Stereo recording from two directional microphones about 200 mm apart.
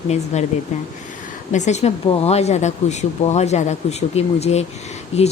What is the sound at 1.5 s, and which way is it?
Speech, 35° left (ahead or behind).